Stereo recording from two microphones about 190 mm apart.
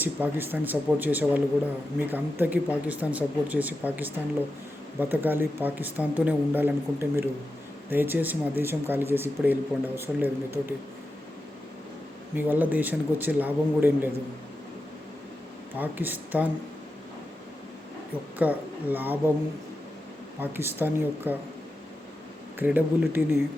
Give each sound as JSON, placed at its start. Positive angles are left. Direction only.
{"t": 0.0, "sound": "speech", "side_deg": -10}
{"t": 12.4, "sound": "speech", "side_deg": -10}
{"t": 15.8, "sound": "speech", "side_deg": -10}
{"t": 18.3, "sound": "speech", "side_deg": -10}
{"t": 20.4, "sound": "speech", "side_deg": -10}
{"t": 22.5, "sound": "speech", "side_deg": -10}